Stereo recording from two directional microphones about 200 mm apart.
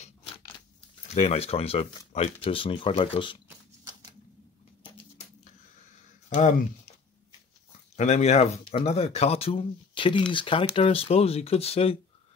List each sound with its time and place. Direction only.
0.0 s biting: 30° left (ahead or behind)
1.1 s speech: 30° left (ahead or behind)
3.4 s shuffling cards: 20° right (ahead or behind)
7.9 s speech: 35° left (ahead or behind)